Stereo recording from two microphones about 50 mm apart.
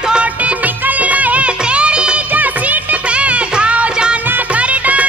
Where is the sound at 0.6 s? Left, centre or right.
Right.